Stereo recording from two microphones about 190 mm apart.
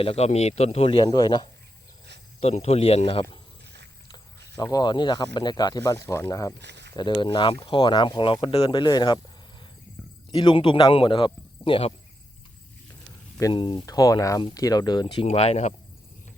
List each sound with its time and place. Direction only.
0.0 s speech: 30° left (ahead or behind)
2.4 s speech: 35° left (ahead or behind)
4.5 s speech: 20° left (ahead or behind)
6.6 s a sound: 65° right (ahead or behind)
6.9 s speech: 25° left (ahead or behind)
10.0 s a sound: centre (ahead or behind)
10.3 s speech: 25° left (ahead or behind)
13.5 s speech: 25° left (ahead or behind)